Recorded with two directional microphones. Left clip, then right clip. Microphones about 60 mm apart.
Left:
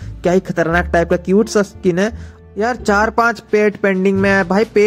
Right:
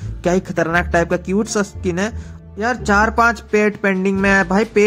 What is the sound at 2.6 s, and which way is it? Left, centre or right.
Speech, left.